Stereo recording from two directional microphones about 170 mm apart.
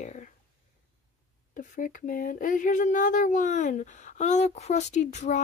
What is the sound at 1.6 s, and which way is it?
Speech, 50° left (ahead or behind).